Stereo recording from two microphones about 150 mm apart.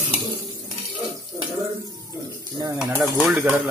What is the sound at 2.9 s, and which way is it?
Speech, 25° right (ahead or behind).